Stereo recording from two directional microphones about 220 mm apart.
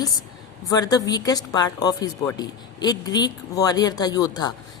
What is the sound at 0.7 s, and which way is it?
Speech, 15° left (ahead or behind).